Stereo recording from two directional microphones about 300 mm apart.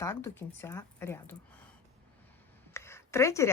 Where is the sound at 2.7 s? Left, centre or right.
Centre.